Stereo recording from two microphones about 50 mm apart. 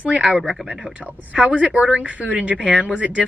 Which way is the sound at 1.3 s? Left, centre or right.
Right.